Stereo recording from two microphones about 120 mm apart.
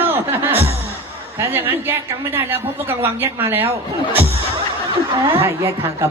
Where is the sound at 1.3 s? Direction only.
20° right (ahead or behind).